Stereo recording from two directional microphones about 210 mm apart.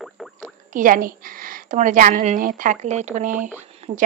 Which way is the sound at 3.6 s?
30° right (ahead or behind).